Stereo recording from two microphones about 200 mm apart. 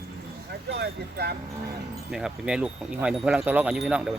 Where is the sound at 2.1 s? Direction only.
5° right (ahead or behind).